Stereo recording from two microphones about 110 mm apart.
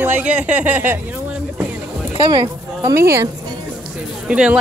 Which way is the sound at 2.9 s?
25° right (ahead or behind).